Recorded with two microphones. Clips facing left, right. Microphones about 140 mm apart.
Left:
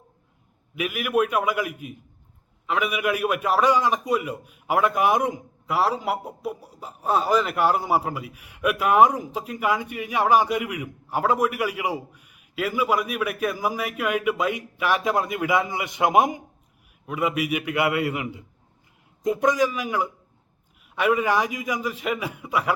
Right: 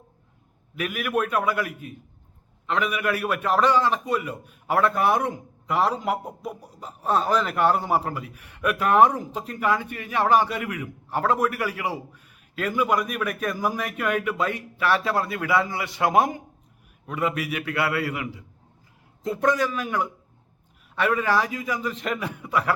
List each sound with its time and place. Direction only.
0.8 s a man's voice: 10° left (ahead or behind)